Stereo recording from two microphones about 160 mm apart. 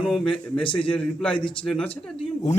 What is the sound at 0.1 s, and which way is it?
A man's voice, 5° left (ahead or behind).